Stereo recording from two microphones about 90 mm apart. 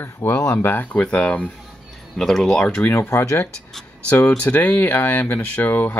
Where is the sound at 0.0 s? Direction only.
25° left (ahead or behind).